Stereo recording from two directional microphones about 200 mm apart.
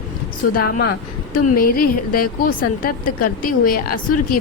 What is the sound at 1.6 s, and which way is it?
A woman's voice, 45° left (ahead or behind).